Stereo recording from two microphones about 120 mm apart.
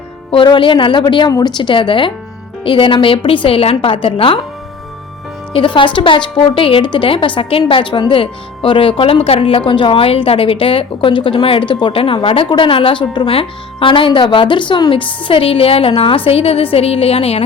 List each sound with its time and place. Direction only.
0.3 s a woman's voice: 45° left (ahead or behind)
5.5 s a woman's voice: 45° left (ahead or behind)